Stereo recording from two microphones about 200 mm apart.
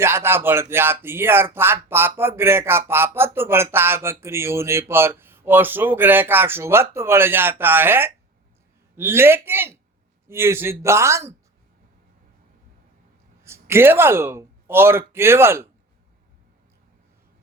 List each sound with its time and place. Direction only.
0.0 s speech: 10° right (ahead or behind)
13.4 s speech: 10° right (ahead or behind)